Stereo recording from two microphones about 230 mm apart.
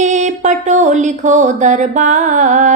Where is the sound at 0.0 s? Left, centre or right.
Right.